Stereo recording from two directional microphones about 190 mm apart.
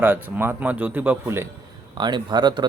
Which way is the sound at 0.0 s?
10° right (ahead or behind).